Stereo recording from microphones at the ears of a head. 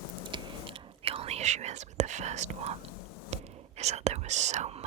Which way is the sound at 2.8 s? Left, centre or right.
Left.